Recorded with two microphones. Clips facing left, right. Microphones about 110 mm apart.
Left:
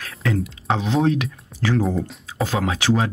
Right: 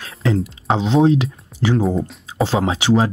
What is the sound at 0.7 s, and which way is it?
Speech, 20° right (ahead or behind).